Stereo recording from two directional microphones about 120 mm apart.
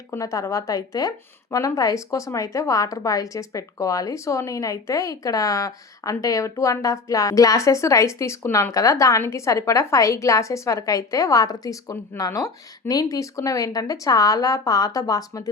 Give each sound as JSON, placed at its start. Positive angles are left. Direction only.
{"t": 0.1, "sound": "a woman's voice", "side_deg": 25}